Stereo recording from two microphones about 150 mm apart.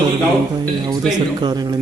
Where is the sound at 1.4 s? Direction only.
30° right (ahead or behind).